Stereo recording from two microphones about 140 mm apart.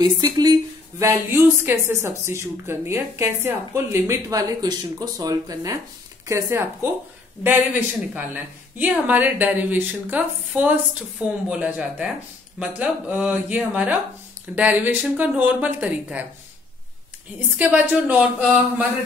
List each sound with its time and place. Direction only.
0.0 s a woman's voice: 30° right (ahead or behind)
8.1 s a woman's voice: 10° right (ahead or behind)
17.6 s a woman's voice: 10° right (ahead or behind)